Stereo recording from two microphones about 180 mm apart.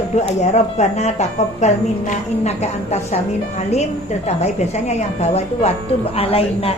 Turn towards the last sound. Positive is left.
turn(degrees=35)  # may be behind; listen again after turning